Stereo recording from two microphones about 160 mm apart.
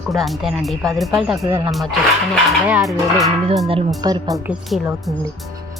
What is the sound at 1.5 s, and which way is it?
Speech, 15° right (ahead or behind).